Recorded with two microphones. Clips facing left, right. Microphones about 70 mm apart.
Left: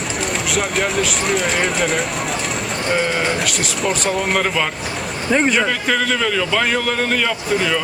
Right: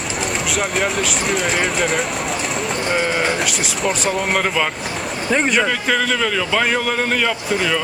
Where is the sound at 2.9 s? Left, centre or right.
Centre.